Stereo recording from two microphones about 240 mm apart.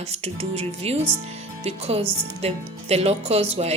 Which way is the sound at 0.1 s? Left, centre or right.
Right.